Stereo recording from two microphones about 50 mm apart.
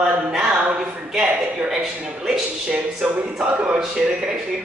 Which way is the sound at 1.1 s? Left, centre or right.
Centre.